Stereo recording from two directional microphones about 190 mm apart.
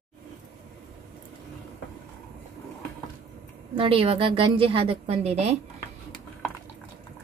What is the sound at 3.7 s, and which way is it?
A woman's voice, 25° right (ahead or behind).